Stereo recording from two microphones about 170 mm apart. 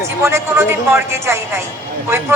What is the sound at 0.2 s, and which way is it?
A man's voice, 15° right (ahead or behind).